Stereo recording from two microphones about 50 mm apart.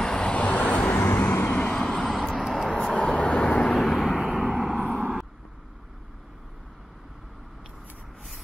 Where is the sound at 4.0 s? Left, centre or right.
Centre.